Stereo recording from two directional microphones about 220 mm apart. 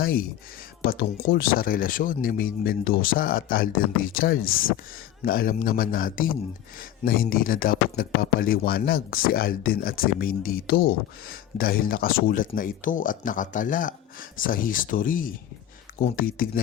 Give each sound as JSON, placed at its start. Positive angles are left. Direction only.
{"t": 0.0, "sound": "speech", "side_deg": 40}